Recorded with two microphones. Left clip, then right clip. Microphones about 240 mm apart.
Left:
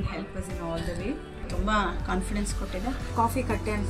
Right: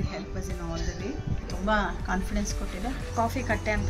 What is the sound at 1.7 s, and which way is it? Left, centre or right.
Speech, centre.